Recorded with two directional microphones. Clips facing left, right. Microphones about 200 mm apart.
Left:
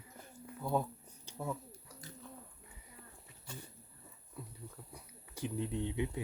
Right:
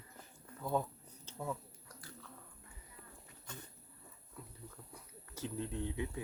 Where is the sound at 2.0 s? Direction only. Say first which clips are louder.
Left 3 dB; 20° left (ahead or behind).